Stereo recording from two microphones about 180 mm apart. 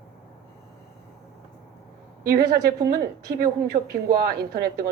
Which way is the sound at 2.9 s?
55° right (ahead or behind).